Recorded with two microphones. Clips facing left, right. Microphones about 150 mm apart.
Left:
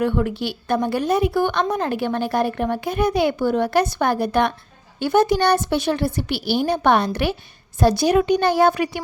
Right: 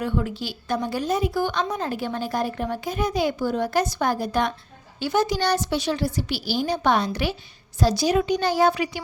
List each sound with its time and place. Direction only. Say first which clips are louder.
0.0 s a woman's voice: left 5 dB; 60° left (ahead or behind)